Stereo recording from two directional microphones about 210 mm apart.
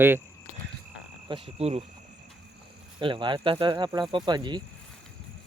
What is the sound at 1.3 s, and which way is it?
Speech, 30° right (ahead or behind).